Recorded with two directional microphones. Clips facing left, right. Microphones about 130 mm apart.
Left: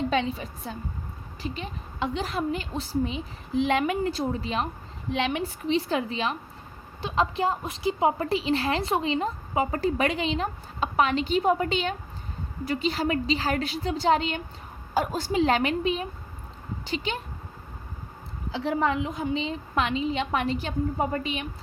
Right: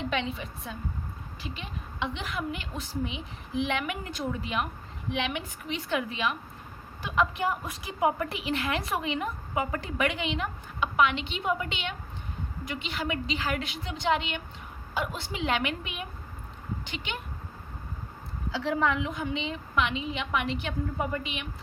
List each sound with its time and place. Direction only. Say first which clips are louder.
0.0 s a woman's voice: left 5 dB; 35° left (ahead or behind)
18.5 s a woman's voice: left 2 dB; 30° left (ahead or behind)